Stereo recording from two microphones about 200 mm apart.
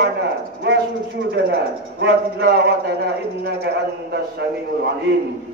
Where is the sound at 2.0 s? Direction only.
55° right (ahead or behind).